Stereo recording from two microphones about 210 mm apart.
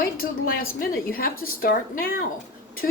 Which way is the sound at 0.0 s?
45° left (ahead or behind).